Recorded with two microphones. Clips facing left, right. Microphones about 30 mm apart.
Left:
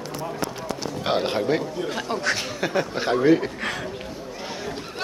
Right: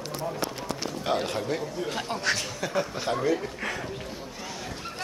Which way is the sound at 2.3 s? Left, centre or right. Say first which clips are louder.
Left 4 dB; left.